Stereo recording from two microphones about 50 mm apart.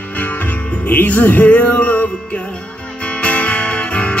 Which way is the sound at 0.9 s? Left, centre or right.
Left.